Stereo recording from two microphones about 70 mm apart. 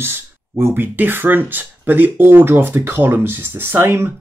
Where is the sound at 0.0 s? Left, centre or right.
Right.